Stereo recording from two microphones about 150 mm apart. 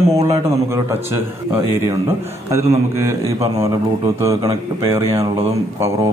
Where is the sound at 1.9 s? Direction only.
20° right (ahead or behind).